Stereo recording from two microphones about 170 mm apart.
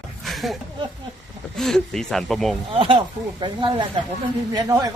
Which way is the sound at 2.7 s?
30° right (ahead or behind).